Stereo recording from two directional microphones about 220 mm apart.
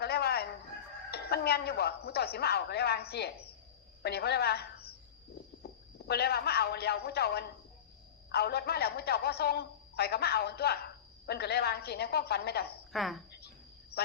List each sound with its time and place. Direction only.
0.0 s fowl: 45° left (ahead or behind)
1.1 s a man's voice: 45° left (ahead or behind)
12.9 s speech: centre (ahead or behind)